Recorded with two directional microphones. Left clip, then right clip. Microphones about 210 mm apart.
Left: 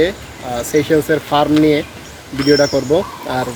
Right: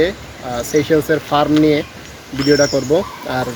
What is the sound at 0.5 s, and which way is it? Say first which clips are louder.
Speech: left 1 dB; centre (ahead or behind).